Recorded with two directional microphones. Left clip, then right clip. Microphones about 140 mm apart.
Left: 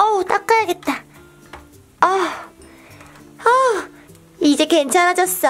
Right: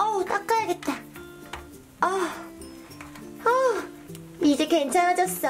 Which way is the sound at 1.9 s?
35° left (ahead or behind).